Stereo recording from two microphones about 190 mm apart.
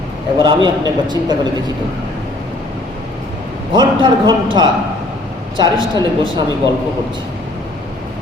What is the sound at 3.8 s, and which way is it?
Speech, 25° right (ahead or behind).